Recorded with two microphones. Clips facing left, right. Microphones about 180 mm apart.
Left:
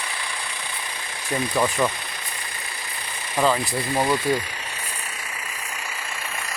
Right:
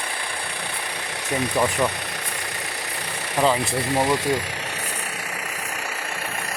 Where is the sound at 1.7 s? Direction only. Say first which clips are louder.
Even; 70° right (ahead or behind).